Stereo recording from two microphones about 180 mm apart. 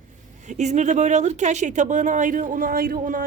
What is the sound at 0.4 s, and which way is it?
Speech, 40° right (ahead or behind).